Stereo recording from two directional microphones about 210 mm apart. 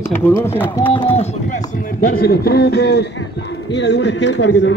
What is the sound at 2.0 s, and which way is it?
A man's voice, 40° left (ahead or behind).